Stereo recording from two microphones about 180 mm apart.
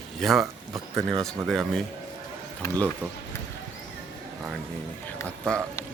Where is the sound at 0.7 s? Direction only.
20° right (ahead or behind).